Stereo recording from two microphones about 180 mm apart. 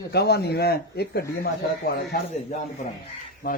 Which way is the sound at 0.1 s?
65° left (ahead or behind).